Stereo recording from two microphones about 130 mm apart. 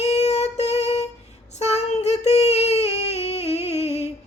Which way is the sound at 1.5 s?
55° left (ahead or behind).